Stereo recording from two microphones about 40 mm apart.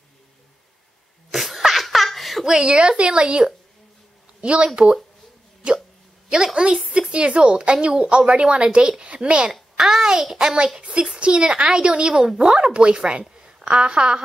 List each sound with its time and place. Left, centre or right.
1.3 s laughter: centre
2.4 s speech: centre
2.7 s a woman's voice: right
5.6 s hiccup: right
6.2 s a woman's voice: centre
9.5 s a woman's voice: centre